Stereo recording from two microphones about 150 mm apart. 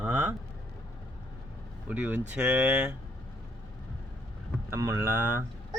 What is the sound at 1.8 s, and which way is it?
Speech, 10° right (ahead or behind).